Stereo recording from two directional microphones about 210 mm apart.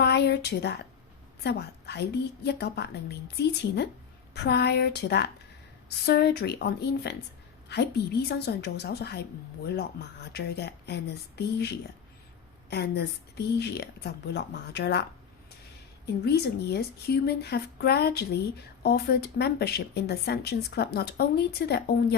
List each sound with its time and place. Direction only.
0.0 s a woman's voice: 55° left (ahead or behind)
16.2 s speech: 50° left (ahead or behind)